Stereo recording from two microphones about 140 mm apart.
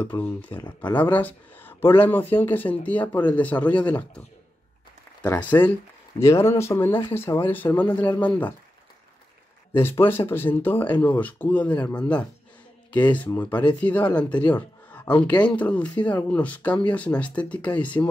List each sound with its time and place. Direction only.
0.0 s speech: 10° left (ahead or behind)
5.2 s speech: 15° left (ahead or behind)
9.8 s speech: 15° left (ahead or behind)